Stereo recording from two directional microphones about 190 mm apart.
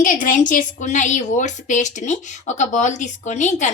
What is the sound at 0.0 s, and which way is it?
A woman's voice, 45° left (ahead or behind).